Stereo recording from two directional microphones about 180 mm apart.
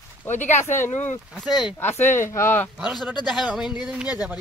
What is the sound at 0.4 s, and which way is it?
Speech, 40° left (ahead or behind).